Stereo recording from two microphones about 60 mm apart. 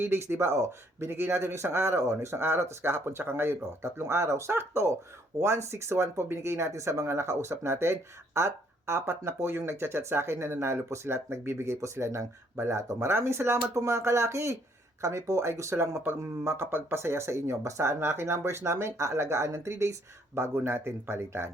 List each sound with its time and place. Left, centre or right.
0.0 s speech: right